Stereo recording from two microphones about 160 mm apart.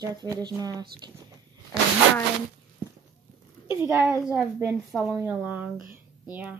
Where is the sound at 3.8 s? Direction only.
15° right (ahead or behind).